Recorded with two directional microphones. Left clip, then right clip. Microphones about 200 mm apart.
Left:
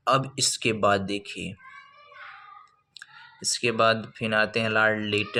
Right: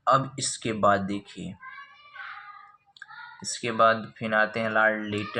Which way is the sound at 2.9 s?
35° left (ahead or behind).